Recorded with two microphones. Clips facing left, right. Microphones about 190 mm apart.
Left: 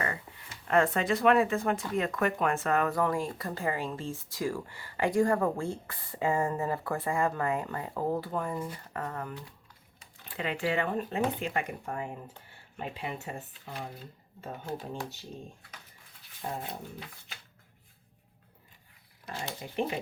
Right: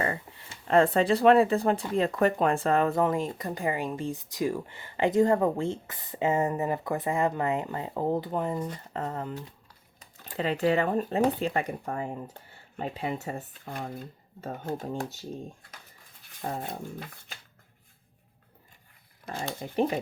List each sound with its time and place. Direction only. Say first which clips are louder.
0.0 s speech: right 4 dB; 30° right (ahead or behind)
10.2 s speech: right 6 dB; 35° right (ahead or behind)
16.2 s dog: right 3 dB; 50° right (ahead or behind)
19.5 s speech: right 6 dB; 45° right (ahead or behind)